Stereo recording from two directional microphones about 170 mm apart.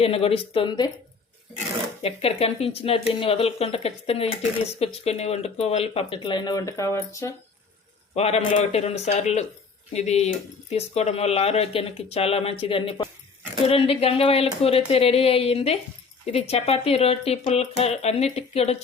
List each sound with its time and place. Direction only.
0.0 s speech: 35° left (ahead or behind)
2.0 s speech: 35° left (ahead or behind); by 7.3 s 15° left (ahead or behind)
8.1 s a man's voice: 40° left (ahead or behind)